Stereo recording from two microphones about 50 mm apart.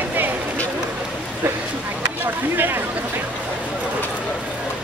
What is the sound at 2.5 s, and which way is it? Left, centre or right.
Speech, right.